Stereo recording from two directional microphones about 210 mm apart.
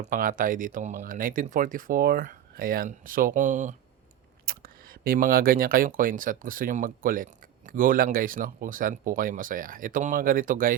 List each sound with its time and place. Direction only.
0.0 s speech: 40° right (ahead or behind)